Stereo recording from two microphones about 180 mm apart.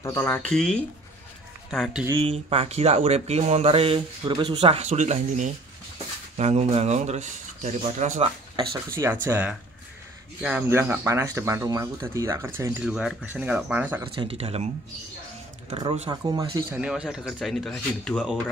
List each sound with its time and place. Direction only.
0.0 s speech: 15° left (ahead or behind)
2.0 s speech: 30° right (ahead or behind)
9.0 s speech: 10° right (ahead or behind)
14.0 s speech: 30° right (ahead or behind)
15.7 s speech: 30° right (ahead or behind)
16.8 s speech: 5° right (ahead or behind)